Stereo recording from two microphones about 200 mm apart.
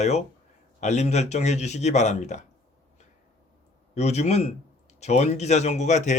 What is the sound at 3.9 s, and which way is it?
Speech, 35° left (ahead or behind).